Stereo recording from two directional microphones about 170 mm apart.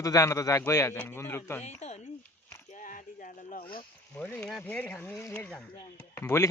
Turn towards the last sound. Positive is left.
turn(degrees=15)  # may be behind; listen again after turning